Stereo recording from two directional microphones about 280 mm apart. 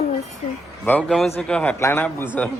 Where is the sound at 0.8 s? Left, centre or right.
Centre.